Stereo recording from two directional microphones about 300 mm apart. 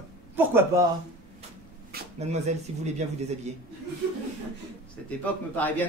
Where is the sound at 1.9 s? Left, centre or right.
Right.